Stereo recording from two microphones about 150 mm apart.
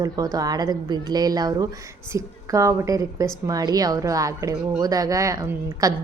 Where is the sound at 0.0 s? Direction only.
25° right (ahead or behind).